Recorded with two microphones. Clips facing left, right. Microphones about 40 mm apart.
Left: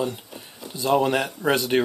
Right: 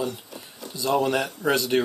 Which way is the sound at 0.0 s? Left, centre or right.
Centre.